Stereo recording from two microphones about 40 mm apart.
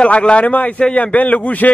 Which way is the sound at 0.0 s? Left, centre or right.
Left.